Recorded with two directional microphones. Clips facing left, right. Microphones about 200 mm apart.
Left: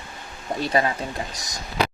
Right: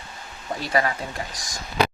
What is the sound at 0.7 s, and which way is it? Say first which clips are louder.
Speech: even; 25° left (ahead or behind).